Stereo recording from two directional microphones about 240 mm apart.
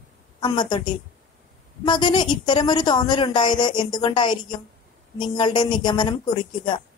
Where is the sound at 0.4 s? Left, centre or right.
Centre.